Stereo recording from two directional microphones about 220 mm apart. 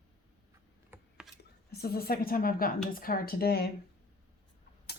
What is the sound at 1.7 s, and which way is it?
Speech, 45° left (ahead or behind).